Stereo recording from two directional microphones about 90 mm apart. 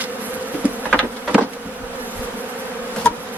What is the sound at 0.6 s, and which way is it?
Insect, 15° right (ahead or behind).